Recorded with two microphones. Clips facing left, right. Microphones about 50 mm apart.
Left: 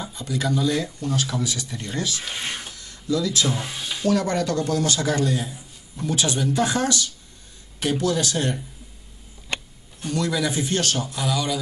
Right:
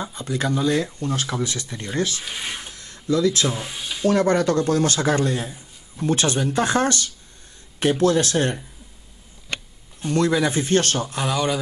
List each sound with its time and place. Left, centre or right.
0.0 s speech: right
2.2 s speech: centre
2.7 s a sound: right
3.4 s speech: centre
4.1 s speech: right
10.0 s speech: right